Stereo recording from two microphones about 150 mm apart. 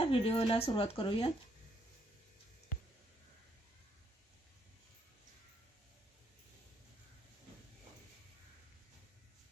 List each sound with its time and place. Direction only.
0.0 s speech: 40° left (ahead or behind)